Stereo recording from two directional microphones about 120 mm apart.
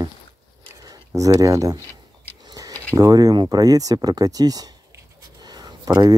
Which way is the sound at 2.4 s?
30° right (ahead or behind).